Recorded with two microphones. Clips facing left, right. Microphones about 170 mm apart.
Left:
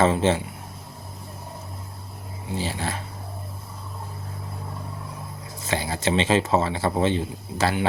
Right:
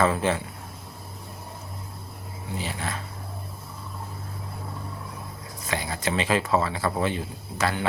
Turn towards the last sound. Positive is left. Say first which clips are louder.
# left 3 dB
turn(degrees=30)  # may be behind; listen again after turning